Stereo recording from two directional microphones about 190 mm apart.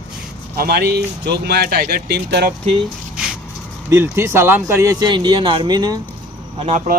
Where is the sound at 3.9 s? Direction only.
15° right (ahead or behind).